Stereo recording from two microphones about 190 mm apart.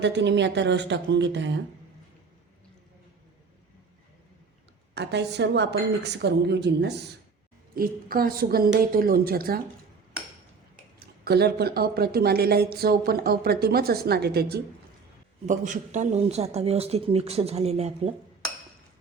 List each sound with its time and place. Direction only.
0.0 s speech: 70° right (ahead or behind)
4.9 s speech: 65° right (ahead or behind)
7.8 s a woman's voice: 50° right (ahead or behind)
11.0 s speech: 55° right (ahead or behind)
15.4 s speech: 40° right (ahead or behind)